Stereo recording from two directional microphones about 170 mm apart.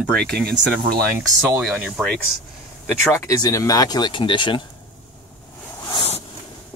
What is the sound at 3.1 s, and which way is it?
Speech, 20° left (ahead or behind).